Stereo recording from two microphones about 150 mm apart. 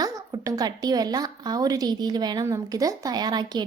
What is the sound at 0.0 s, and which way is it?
A woman's voice, 25° right (ahead or behind).